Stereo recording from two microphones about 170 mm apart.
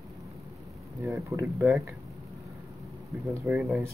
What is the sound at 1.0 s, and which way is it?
Speech, 15° right (ahead or behind).